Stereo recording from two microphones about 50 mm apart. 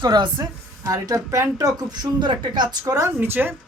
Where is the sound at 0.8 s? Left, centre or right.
Right.